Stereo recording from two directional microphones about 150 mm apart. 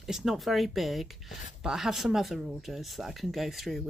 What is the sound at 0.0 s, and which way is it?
Speech, centre (ahead or behind).